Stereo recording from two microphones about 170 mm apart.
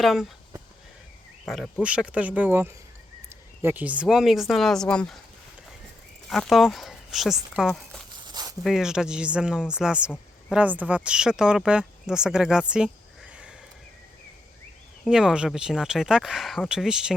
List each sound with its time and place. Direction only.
0.0 s speech: centre (ahead or behind)
1.5 s speech: centre (ahead or behind)
6.2 s speech: centre (ahead or behind)
8.3 s zipper: 25° right (ahead or behind)
8.6 s speech: 5° right (ahead or behind)
15.0 s speech: 5° right (ahead or behind)